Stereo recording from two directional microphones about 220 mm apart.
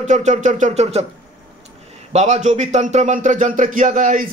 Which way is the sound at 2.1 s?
30° right (ahead or behind).